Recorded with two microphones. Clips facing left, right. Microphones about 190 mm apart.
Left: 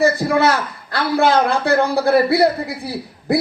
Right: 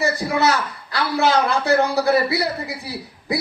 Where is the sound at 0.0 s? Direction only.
55° left (ahead or behind).